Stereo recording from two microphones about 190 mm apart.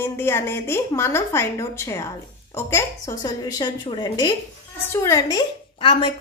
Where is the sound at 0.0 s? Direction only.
15° left (ahead or behind).